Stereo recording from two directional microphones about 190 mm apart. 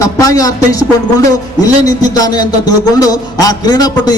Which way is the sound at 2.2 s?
20° left (ahead or behind).